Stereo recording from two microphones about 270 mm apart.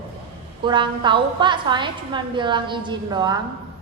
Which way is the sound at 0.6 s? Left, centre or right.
Centre.